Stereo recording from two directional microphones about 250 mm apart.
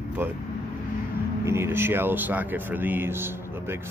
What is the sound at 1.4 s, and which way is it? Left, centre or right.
Speech, centre.